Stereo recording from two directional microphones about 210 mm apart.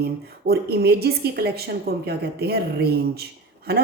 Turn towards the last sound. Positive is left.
turn(degrees=-50)  # may be behind; listen again after turning